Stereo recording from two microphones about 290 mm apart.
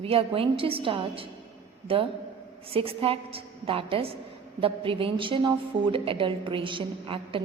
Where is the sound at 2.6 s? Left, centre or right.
Centre.